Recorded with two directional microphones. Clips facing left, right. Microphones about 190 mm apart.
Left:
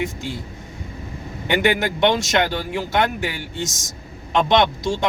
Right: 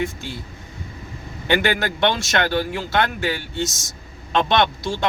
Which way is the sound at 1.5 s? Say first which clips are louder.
Left 1 dB; 15° left (ahead or behind).